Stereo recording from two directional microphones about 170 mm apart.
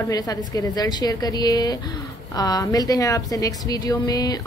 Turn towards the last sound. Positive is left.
turn(degrees=20)  # may be behind; listen again after turning